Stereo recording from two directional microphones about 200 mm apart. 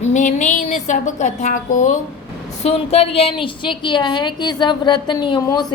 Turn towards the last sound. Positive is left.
turn(degrees=20)  # may be behind; listen again after turning